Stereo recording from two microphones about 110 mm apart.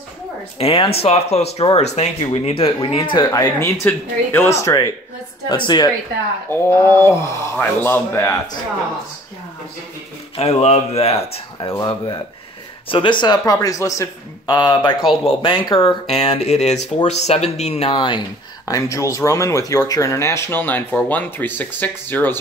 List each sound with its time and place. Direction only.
0.6 s speech: 60° left (ahead or behind)
3.3 s speech: 30° left (ahead or behind)
3.8 s speech: 20° left (ahead or behind)
5.5 s speech: 40° left (ahead or behind)
6.5 s speech: 20° left (ahead or behind)
10.3 s speech: 75° left (ahead or behind)
12.8 s speech: 50° left (ahead or behind); by 14.0 s 30° left (ahead or behind)
14.4 s speech: 40° left (ahead or behind)
15.0 s speech: 5° right (ahead or behind)
15.4 s speech: 45° left (ahead or behind); by 17.9 s 75° left (ahead or behind)
17.9 s speech: 45° left (ahead or behind)
18.7 s speech: 30° left (ahead or behind)